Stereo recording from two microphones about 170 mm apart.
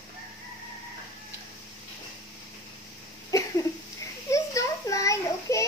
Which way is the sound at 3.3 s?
20° left (ahead or behind).